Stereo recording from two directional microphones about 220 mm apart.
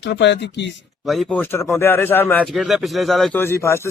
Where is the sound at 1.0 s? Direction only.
Centre (ahead or behind).